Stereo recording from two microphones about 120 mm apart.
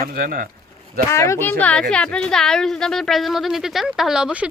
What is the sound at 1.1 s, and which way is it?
A woman's voice, 25° left (ahead or behind).